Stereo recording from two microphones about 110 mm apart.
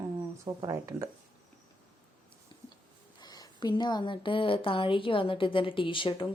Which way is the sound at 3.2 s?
35° left (ahead or behind).